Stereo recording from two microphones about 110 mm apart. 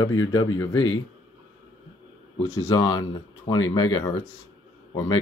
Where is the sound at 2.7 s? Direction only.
40° left (ahead or behind).